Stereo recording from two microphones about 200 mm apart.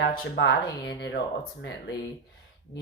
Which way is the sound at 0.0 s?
50° left (ahead or behind).